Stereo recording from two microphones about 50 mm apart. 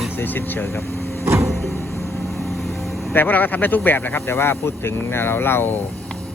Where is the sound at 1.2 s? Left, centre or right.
Right.